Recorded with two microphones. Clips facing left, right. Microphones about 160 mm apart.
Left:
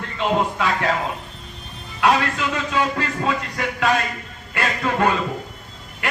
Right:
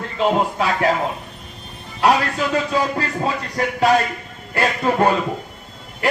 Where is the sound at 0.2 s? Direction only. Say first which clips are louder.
Right 2 dB; 35° right (ahead or behind).